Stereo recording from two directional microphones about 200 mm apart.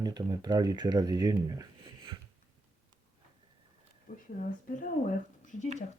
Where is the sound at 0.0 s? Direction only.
20° right (ahead or behind).